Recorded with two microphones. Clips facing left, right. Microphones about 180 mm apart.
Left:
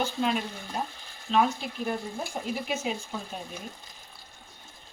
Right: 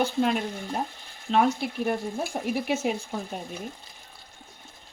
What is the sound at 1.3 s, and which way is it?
Speech, 55° right (ahead or behind).